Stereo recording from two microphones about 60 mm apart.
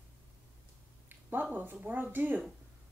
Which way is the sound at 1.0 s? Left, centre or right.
Right.